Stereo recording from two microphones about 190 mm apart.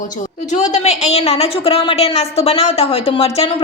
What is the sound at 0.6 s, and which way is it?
A woman's voice, 35° left (ahead or behind).